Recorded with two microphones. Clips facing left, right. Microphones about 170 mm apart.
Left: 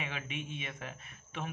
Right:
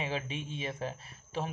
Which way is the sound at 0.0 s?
30° right (ahead or behind).